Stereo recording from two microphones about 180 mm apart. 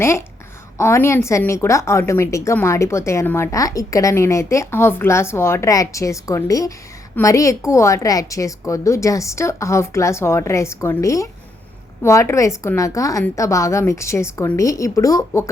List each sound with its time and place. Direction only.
0.8 s a woman's voice: 15° left (ahead or behind)